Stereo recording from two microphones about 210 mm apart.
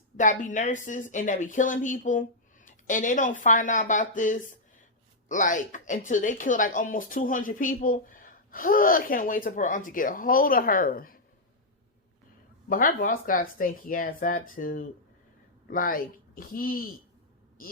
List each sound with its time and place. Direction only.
0.2 s speech: 35° left (ahead or behind)
12.6 s speech: 40° left (ahead or behind)